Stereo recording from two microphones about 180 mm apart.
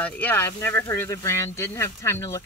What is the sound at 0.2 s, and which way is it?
Speech, 10° left (ahead or behind).